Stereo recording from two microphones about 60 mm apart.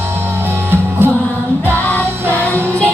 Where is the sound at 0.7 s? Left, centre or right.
Right.